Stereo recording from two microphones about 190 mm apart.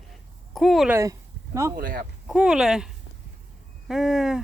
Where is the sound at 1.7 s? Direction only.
50° right (ahead or behind).